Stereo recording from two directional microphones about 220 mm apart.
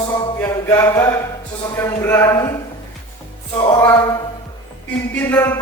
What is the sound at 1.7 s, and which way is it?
Speech, 10° left (ahead or behind).